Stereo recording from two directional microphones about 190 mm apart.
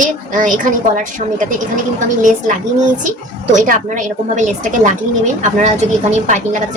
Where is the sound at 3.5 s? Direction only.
40° right (ahead or behind).